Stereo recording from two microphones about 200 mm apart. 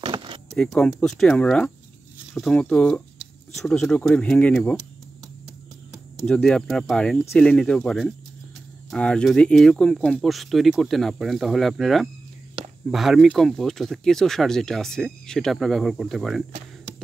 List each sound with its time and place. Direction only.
0.0 s a sound: 25° right (ahead or behind)
0.5 s speech: centre (ahead or behind)
5.9 s speech: centre (ahead or behind)